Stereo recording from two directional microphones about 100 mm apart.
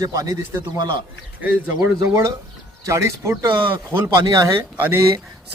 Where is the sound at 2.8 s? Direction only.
30° right (ahead or behind).